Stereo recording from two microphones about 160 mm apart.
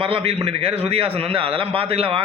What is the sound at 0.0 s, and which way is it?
A man's voice, 35° right (ahead or behind).